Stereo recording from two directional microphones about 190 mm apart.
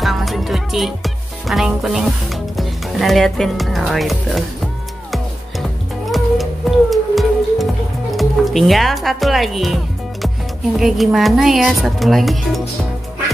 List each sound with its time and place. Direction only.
0.0 s music: centre (ahead or behind)
6.1 s music: centre (ahead or behind)
8.1 s speech: centre (ahead or behind)
10.8 s speech: centre (ahead or behind)